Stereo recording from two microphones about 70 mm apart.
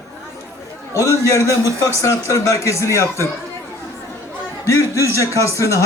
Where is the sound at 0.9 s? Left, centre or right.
Left.